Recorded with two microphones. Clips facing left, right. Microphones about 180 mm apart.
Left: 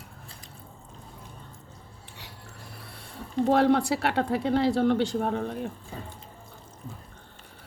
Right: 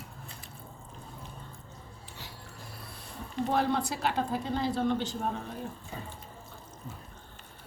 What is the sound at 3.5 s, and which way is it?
Speech, 70° left (ahead or behind).